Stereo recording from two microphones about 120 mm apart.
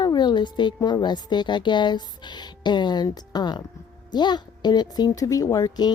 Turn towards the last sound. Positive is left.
turn(degrees=30)  # may be behind; listen again after turning